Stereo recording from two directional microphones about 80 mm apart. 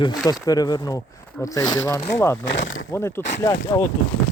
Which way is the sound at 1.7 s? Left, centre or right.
Left.